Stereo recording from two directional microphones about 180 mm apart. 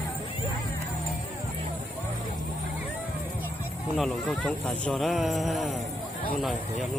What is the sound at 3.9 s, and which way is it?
Speech, centre (ahead or behind).